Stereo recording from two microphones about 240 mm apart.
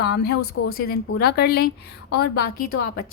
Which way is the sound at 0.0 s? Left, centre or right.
Left.